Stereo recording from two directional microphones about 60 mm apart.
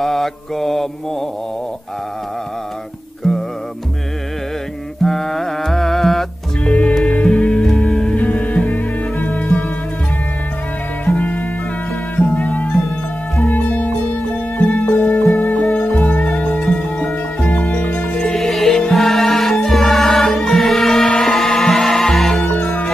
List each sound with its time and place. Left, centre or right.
0.0 s mantra: centre
3.2 s music: centre
5.0 s music: centre
8.2 s music: left
11.1 s music: left
18.3 s music: centre
22.4 s music: left